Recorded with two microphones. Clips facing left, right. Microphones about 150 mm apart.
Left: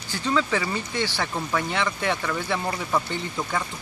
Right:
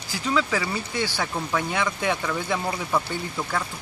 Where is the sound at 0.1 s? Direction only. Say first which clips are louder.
Even; 5° right (ahead or behind).